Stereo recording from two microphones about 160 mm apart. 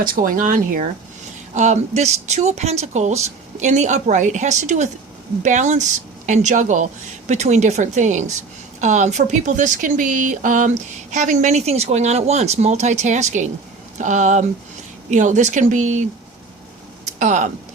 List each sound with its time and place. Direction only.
0.0 s speech: 60° right (ahead or behind)
1.5 s a woman's voice: 45° right (ahead or behind)
17.2 s a woman's voice: 50° right (ahead or behind)